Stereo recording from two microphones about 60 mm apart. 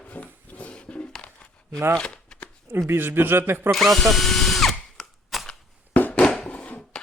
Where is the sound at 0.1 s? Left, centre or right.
Left.